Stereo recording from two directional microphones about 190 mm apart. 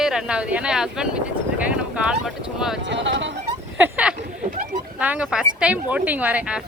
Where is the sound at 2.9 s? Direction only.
70° right (ahead or behind).